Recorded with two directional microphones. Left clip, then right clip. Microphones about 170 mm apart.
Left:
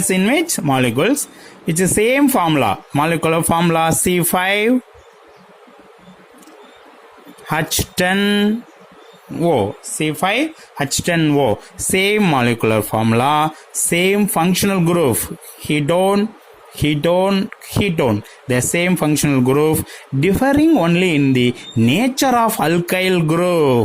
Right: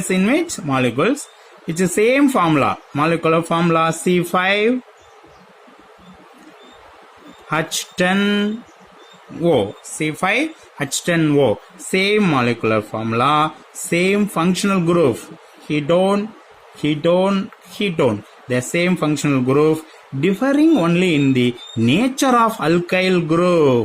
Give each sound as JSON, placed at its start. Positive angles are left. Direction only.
{"t": 0.1, "sound": "speech", "side_deg": 45}
{"t": 7.5, "sound": "speech", "side_deg": 50}